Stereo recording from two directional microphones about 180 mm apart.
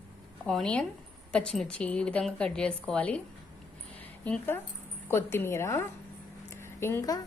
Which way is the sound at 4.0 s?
10° left (ahead or behind).